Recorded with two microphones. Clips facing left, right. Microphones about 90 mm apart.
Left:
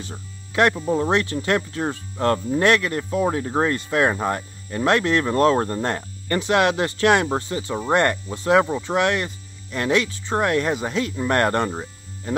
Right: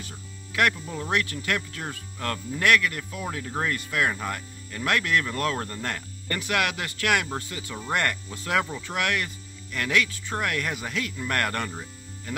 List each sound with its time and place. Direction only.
0.0 s speech: 25° left (ahead or behind)